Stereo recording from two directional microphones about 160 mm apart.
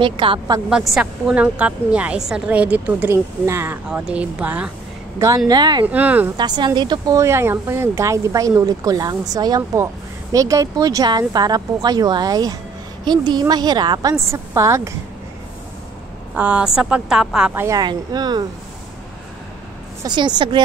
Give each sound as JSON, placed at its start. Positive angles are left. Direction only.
{"t": 0.0, "sound": "a woman's voice", "side_deg": -30}
{"t": 0.7, "sound": "a woman's voice", "side_deg": -5}
{"t": 5.5, "sound": "speech", "side_deg": -25}
{"t": 5.9, "sound": "a woman's voice", "side_deg": -10}
{"t": 6.3, "sound": "speech", "side_deg": -25}
{"t": 16.3, "sound": "a woman's voice", "side_deg": -10}
{"t": 17.6, "sound": "speech", "side_deg": -25}
{"t": 20.0, "sound": "speech", "side_deg": -25}